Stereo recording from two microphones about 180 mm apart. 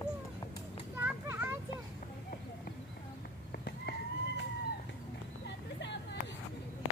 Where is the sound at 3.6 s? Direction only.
65° left (ahead or behind).